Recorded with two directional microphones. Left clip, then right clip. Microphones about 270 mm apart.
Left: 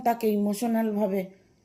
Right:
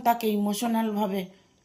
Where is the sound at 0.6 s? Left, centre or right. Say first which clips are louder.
Even; right.